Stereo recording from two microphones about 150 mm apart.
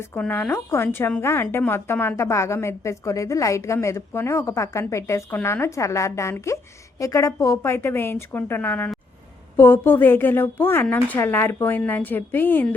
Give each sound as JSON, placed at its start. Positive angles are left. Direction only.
{"t": 0.0, "sound": "a woman's voice", "side_deg": 15}